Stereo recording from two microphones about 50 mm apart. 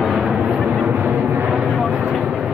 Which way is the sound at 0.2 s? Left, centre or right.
Centre.